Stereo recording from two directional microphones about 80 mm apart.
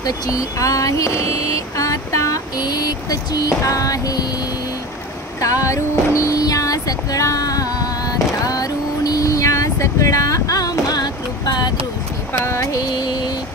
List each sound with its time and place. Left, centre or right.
0.0 s speech: left
5.4 s speech: left
8.4 s vehicle: left
12.4 s a sound: left
12.8 s mantra: left